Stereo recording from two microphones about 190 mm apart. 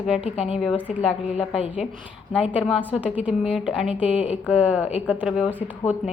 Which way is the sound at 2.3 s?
5° right (ahead or behind).